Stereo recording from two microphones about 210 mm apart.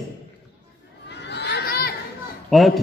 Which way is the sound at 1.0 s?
55° left (ahead or behind).